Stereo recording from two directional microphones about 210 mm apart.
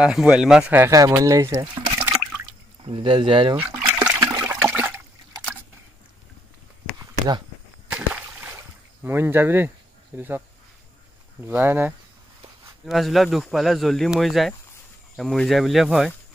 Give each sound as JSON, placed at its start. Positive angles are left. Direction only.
{"t": 0.0, "sound": "speech", "side_deg": -5}
{"t": 4.1, "sound": "toilet flush", "side_deg": -15}
{"t": 7.9, "sound": "a sound", "side_deg": -10}
{"t": 10.1, "sound": "speech", "side_deg": -10}
{"t": 11.4, "sound": "speech", "side_deg": -10}